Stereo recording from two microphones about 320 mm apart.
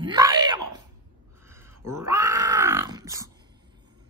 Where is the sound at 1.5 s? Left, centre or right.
Centre.